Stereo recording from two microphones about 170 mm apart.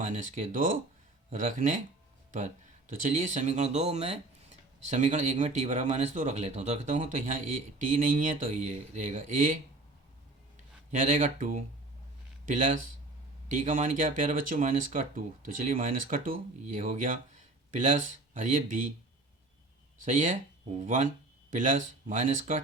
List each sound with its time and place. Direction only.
0.0 s speech: 50° right (ahead or behind)
10.9 s speech: 50° right (ahead or behind)
20.0 s speech: 50° right (ahead or behind)